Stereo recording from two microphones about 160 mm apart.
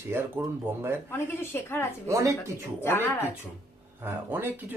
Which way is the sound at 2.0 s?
20° right (ahead or behind).